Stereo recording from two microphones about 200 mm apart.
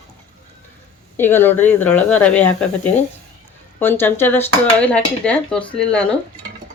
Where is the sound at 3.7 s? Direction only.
10° left (ahead or behind).